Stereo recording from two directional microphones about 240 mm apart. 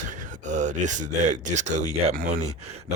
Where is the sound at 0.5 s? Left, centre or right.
Right.